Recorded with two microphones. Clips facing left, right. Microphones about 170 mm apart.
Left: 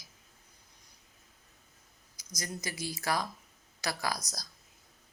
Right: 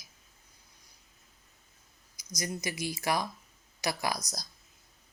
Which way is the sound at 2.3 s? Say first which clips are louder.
Right 4 dB; 15° right (ahead or behind).